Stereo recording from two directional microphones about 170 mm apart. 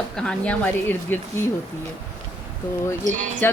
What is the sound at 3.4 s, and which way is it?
Music, 10° left (ahead or behind).